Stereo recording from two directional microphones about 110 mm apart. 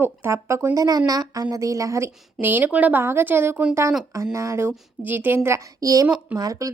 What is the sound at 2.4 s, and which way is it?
A woman's voice, 15° right (ahead or behind).